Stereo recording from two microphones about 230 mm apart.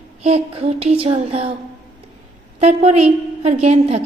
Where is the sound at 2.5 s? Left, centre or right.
Right.